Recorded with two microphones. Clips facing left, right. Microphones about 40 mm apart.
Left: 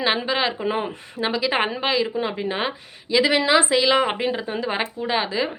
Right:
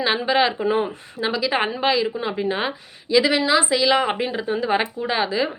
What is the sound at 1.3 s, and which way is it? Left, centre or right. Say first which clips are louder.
Speech: even; left.